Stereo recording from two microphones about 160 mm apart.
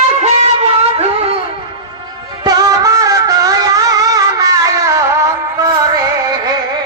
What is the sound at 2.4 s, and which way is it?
Music, 25° right (ahead or behind).